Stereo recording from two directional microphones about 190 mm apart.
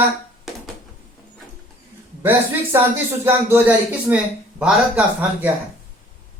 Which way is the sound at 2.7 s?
10° right (ahead or behind).